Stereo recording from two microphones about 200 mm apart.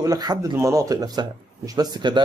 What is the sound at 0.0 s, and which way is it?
A man's voice, 20° right (ahead or behind).